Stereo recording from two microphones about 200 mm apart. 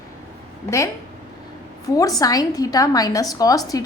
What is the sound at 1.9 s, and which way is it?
A woman's voice, 15° left (ahead or behind).